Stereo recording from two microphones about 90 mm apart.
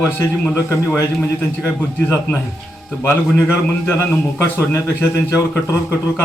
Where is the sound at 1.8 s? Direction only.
25° left (ahead or behind).